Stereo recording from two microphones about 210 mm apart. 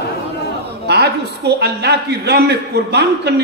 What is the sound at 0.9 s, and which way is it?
A man's voice, 50° right (ahead or behind).